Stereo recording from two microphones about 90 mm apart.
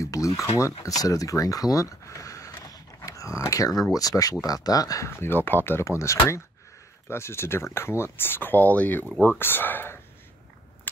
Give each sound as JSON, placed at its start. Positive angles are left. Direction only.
{"t": 0.0, "sound": "speech", "side_deg": 35}
{"t": 5.1, "sound": "speech", "side_deg": 25}